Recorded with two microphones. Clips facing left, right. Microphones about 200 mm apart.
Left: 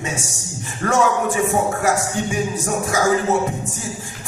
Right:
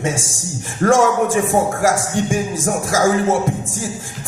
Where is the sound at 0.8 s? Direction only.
45° right (ahead or behind).